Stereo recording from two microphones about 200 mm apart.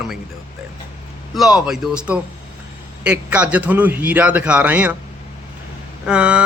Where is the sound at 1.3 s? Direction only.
Centre (ahead or behind).